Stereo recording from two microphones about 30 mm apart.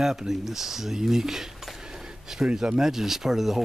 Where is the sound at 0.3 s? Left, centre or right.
Centre.